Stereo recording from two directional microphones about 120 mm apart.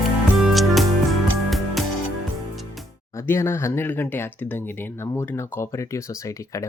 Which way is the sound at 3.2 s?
20° left (ahead or behind).